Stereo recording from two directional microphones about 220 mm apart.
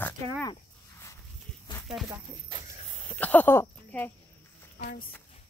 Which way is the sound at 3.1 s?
5° left (ahead or behind).